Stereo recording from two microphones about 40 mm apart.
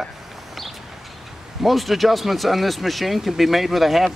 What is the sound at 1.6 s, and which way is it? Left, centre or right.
Speech, centre.